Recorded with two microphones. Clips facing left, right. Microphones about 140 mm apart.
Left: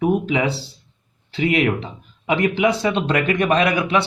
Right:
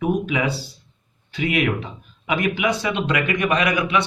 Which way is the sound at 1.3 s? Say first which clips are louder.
Left 3 dB; 25° left (ahead or behind).